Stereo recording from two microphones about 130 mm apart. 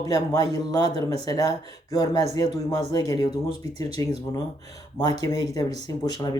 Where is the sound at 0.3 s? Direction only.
30° left (ahead or behind).